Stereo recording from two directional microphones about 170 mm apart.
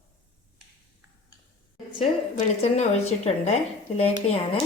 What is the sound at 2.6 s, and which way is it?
A woman's voice, 40° left (ahead or behind).